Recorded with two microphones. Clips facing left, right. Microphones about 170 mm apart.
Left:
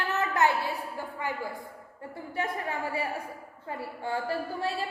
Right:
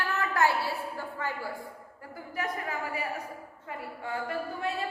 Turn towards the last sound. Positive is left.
turn(degrees=30)  # may be behind; listen again after turning